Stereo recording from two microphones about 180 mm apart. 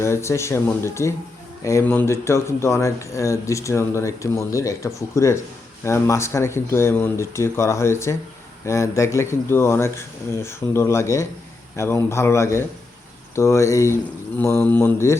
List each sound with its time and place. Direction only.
0.0 s speech: 15° left (ahead or behind)